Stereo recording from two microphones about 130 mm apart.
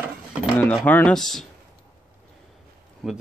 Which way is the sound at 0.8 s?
10° left (ahead or behind).